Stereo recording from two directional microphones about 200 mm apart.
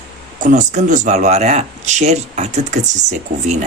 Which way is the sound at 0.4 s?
35° right (ahead or behind).